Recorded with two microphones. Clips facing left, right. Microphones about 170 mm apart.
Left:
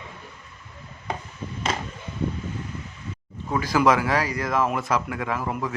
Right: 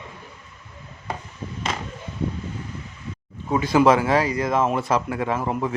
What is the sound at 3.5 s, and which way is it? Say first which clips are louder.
Speech: right 3 dB; 20° right (ahead or behind).